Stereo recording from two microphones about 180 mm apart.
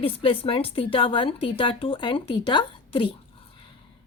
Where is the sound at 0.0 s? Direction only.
30° left (ahead or behind).